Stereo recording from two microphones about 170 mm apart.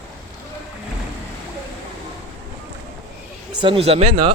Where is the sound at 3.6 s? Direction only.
30° right (ahead or behind).